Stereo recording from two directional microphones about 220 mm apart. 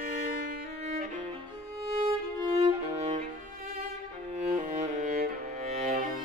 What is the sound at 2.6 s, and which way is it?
Music, 30° right (ahead or behind).